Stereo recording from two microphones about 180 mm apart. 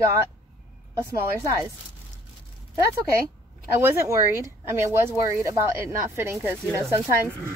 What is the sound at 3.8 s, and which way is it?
Speech, 15° right (ahead or behind).